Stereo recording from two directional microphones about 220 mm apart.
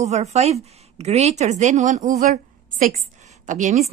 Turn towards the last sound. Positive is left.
turn(degrees=-35)  # may be behind; listen again after turning